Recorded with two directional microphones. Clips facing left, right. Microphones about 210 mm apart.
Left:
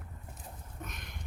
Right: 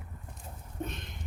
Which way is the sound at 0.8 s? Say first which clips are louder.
Right 8 dB; 25° right (ahead or behind).